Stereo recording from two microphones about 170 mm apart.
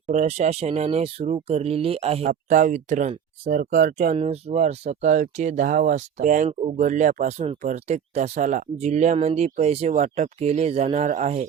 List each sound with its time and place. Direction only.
0.1 s speech: 40° right (ahead or behind)